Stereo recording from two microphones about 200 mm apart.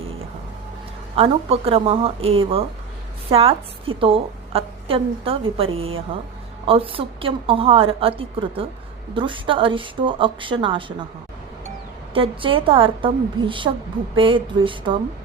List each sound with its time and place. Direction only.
1.1 s a woman's voice: 30° right (ahead or behind)
12.1 s a woman's voice: 25° right (ahead or behind)